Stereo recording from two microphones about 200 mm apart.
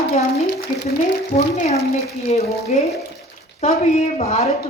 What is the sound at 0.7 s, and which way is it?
Speech, 45° left (ahead or behind).